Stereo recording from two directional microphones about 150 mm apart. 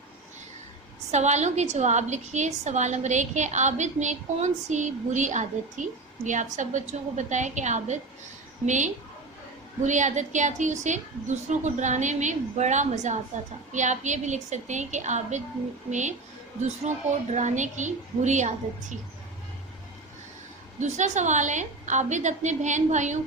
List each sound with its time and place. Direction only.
1.1 s a woman's voice: 50° right (ahead or behind)
20.7 s a woman's voice: 50° right (ahead or behind)